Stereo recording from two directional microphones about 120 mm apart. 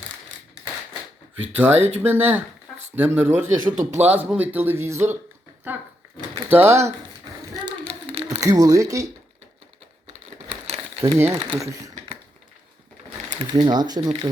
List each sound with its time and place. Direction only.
1.5 s speech: 15° right (ahead or behind)
3.6 s speech: 90° right
4.0 s a man's voice: 15° right (ahead or behind)
6.5 s speech: 20° right (ahead or behind)
8.4 s speech: 30° right (ahead or behind)
10.1 s crumpling: 55° right (ahead or behind)
11.0 s speech: 25° right (ahead or behind)
13.4 s speech: 40° right (ahead or behind)